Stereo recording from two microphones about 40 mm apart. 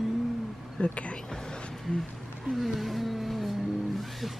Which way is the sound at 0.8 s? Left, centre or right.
Left.